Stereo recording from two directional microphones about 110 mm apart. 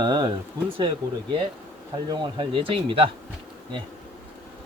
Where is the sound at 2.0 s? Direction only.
45° right (ahead or behind).